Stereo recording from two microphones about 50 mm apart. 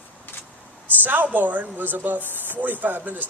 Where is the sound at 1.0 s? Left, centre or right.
Right.